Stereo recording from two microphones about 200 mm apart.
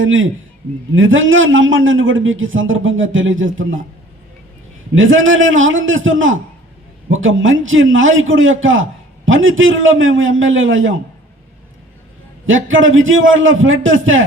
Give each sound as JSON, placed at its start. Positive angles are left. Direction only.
{"t": 0.0, "sound": "a man's voice", "side_deg": -75}
{"t": 4.9, "sound": "a man's voice", "side_deg": -75}
{"t": 12.5, "sound": "a man's voice", "side_deg": -75}